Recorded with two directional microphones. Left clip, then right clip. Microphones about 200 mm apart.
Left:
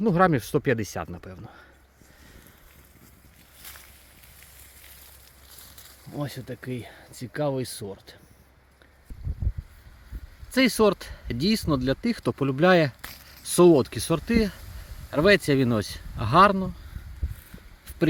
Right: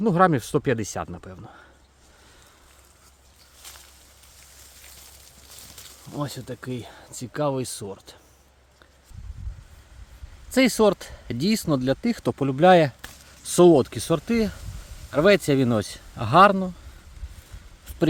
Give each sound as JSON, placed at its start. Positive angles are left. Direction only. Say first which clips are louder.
{"t": 0.0, "sound": "speech", "louder": "right 2 dB", "side_deg": 0}
{"t": 6.1, "sound": "speech", "louder": "right 2 dB", "side_deg": 0}
{"t": 10.5, "sound": "speech", "louder": "right 2 dB", "side_deg": -5}